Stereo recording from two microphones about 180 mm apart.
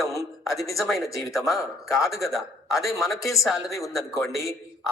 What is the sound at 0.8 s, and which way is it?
Speech, centre (ahead or behind).